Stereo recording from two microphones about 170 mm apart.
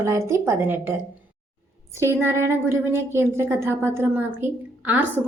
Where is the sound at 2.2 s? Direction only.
15° right (ahead or behind).